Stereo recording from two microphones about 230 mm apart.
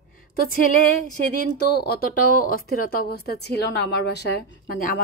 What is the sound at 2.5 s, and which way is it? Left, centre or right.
Speech, left.